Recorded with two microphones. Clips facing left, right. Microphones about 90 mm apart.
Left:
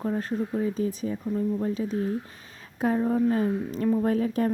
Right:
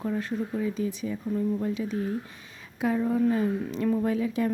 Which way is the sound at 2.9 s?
30° left (ahead or behind).